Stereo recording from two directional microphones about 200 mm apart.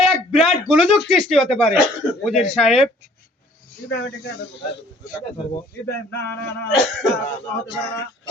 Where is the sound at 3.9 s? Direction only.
60° left (ahead or behind).